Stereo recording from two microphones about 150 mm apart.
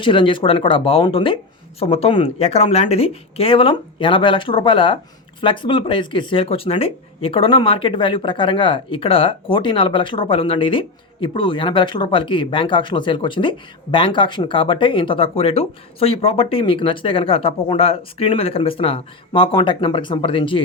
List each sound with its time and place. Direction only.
0.0 s speech: 35° left (ahead or behind)